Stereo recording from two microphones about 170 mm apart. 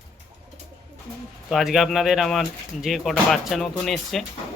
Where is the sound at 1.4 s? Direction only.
Centre (ahead or behind).